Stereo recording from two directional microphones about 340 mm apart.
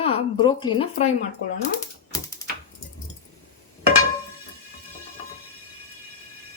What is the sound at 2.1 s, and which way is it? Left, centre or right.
Typewriter, centre.